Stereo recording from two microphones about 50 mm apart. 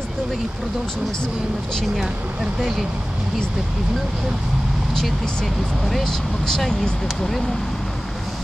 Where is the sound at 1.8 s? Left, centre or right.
Centre.